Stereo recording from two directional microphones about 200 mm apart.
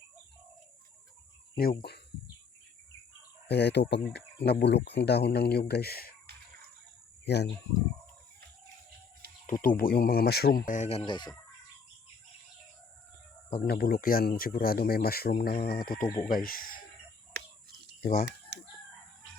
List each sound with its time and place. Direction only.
1.8 s speech: 55° left (ahead or behind)
3.5 s speech: 60° left (ahead or behind)
7.3 s speech: 55° left (ahead or behind)
9.5 s speech: 45° left (ahead or behind); by 11.3 s 25° left (ahead or behind)
13.5 s speech: 50° left (ahead or behind)
16.0 s speech: 20° left (ahead or behind)
16.3 s speech: 45° left (ahead or behind)
17.3 s a sound: 55° right (ahead or behind)
18.0 s speech: 45° left (ahead or behind)